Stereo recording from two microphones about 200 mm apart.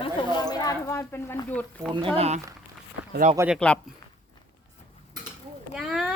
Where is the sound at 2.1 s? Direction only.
30° right (ahead or behind).